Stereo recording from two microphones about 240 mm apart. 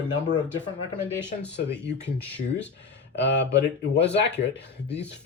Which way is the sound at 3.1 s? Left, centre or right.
Left.